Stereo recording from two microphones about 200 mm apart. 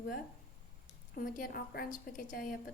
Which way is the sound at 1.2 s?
45° left (ahead or behind).